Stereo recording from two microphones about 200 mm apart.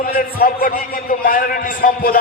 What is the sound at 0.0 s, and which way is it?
A man's voice, 45° left (ahead or behind).